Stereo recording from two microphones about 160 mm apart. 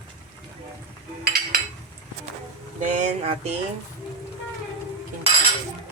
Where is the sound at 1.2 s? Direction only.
70° right (ahead or behind).